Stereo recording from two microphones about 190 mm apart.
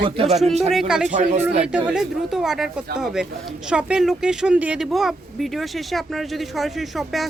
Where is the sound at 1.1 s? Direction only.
40° right (ahead or behind).